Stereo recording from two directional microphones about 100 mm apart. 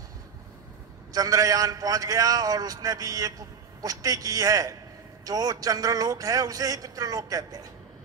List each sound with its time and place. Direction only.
1.1 s a man's voice: 35° right (ahead or behind)